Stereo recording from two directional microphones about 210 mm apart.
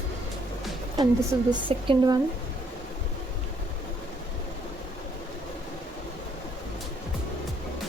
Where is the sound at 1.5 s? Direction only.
20° right (ahead or behind).